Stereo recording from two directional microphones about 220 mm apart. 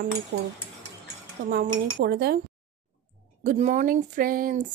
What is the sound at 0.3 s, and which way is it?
Cutlery, 55° right (ahead or behind).